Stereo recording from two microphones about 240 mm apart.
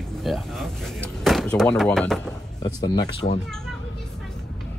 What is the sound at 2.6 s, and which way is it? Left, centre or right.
Speech, centre.